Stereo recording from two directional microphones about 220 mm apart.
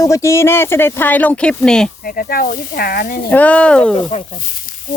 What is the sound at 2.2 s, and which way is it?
Speech, 40° left (ahead or behind).